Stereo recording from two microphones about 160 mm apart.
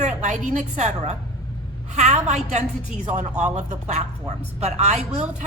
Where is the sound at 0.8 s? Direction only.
45° right (ahead or behind).